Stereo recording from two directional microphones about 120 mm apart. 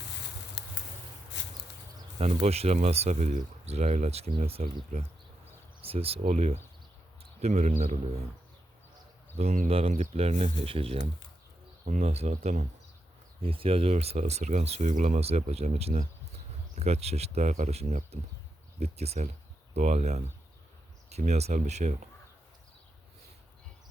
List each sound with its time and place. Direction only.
2.1 s speech: 60° right (ahead or behind)
6.2 s speech: 65° right (ahead or behind)
9.4 s speech: 65° right (ahead or behind)
10.6 s speech: 55° right (ahead or behind)
11.9 s speech: 65° right (ahead or behind)
13.4 s speech: 50° right (ahead or behind); by 22.1 s 70° right (ahead or behind)